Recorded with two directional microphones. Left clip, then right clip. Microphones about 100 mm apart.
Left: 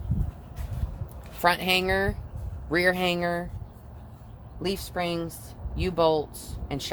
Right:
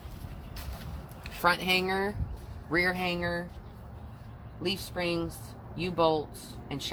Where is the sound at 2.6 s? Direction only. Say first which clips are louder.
Left 5 dB; 85° left.